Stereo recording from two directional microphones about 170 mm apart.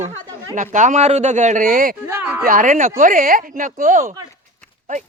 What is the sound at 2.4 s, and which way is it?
Speech, 50° right (ahead or behind).